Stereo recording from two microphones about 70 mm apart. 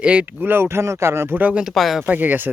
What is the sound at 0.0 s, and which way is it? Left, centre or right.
Speech, centre.